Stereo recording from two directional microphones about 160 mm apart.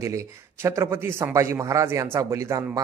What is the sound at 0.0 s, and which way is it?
A man's voice, 20° right (ahead or behind).